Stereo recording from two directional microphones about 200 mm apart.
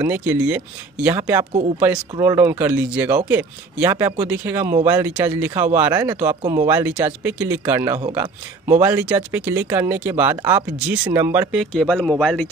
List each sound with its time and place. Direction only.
0.0 s speech: 10° right (ahead or behind)
1.4 s speech: 30° right (ahead or behind)
2.1 s speech: 15° right (ahead or behind)
11.5 s speech: centre (ahead or behind)